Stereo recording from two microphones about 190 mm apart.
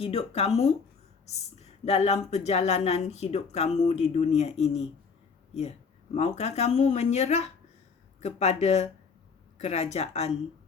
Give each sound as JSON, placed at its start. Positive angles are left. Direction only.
{"t": 0.0, "sound": "speech", "side_deg": 30}
{"t": 6.1, "sound": "speech", "side_deg": 35}